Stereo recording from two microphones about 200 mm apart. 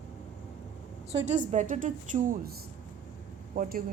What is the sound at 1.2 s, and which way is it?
A woman's voice, 35° right (ahead or behind).